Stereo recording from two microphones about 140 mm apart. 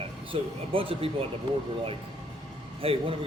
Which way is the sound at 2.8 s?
45° right (ahead or behind).